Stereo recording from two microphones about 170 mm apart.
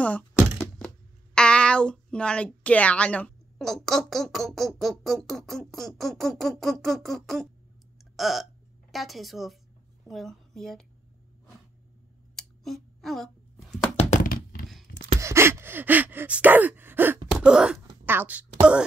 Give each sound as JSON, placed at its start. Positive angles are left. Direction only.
{"t": 0.3, "sound": "thunk", "side_deg": 0}
{"t": 1.3, "sound": "a woman's voice", "side_deg": 5}
{"t": 12.4, "sound": "a sound", "side_deg": 0}
{"t": 13.9, "sound": "thunk", "side_deg": 45}
{"t": 15.1, "sound": "gasp", "side_deg": -15}
{"t": 17.3, "sound": "wail", "side_deg": -5}
{"t": 17.7, "sound": "a sound", "side_deg": -10}
{"t": 18.6, "sound": "speech", "side_deg": -5}